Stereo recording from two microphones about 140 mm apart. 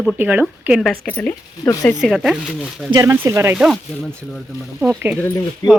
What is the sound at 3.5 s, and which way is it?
Speech, 5° right (ahead or behind).